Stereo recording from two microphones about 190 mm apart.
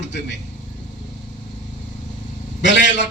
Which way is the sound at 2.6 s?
65° left (ahead or behind).